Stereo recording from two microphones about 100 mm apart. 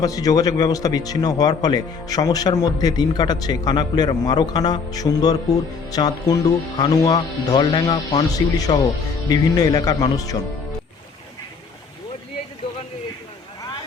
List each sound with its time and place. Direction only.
0.0 s a man's voice: 40° left (ahead or behind)